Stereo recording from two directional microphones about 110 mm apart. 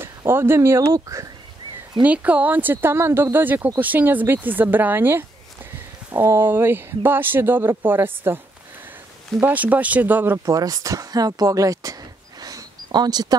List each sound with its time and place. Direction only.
0.0 s speech: 20° right (ahead or behind)
2.0 s speech: 15° right (ahead or behind)
9.4 s speech: 15° right (ahead or behind)
10.4 s speech: 35° right (ahead or behind)